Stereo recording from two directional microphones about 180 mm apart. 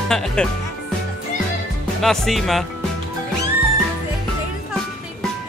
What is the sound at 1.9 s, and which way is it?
Speech, centre (ahead or behind).